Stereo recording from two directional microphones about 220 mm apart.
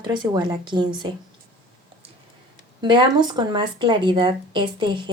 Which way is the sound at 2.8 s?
20° right (ahead or behind).